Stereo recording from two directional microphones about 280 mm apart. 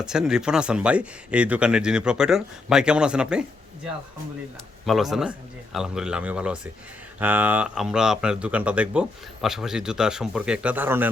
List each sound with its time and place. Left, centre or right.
0.0 s speech: centre
4.9 s speech: centre